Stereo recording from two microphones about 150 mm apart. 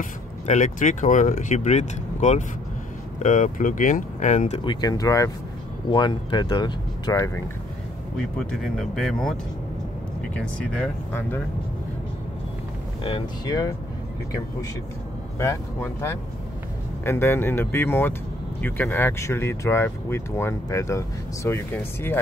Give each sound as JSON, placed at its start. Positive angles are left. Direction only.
{"t": 0.5, "sound": "speech", "side_deg": 55}
{"t": 4.6, "sound": "speech", "side_deg": 25}
{"t": 8.2, "sound": "speech", "side_deg": 5}
{"t": 10.3, "sound": "speech", "side_deg": 5}
{"t": 13.5, "sound": "speech", "side_deg": 25}
{"t": 15.3, "sound": "speech", "side_deg": 20}